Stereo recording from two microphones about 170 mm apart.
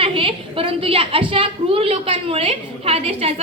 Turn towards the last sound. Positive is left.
turn(degrees=-35)  # may be behind; listen again after turning